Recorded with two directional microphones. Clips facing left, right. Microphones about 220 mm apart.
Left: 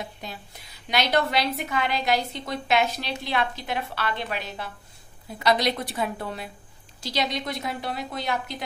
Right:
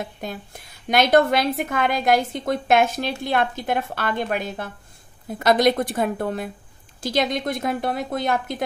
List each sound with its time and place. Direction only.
0.0 s a woman's voice: 50° right (ahead or behind)